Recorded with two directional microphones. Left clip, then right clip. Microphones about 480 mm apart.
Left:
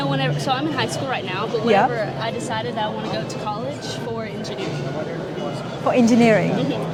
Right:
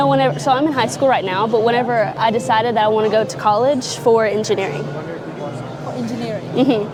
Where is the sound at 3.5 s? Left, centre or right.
Right.